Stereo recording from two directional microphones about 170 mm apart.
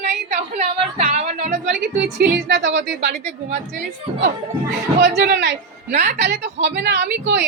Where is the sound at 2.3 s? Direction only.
90° right.